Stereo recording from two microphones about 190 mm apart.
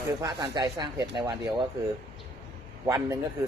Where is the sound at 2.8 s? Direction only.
15° right (ahead or behind).